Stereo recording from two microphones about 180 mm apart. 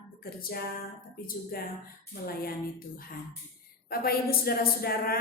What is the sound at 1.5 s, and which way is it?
Speech, 55° left (ahead or behind).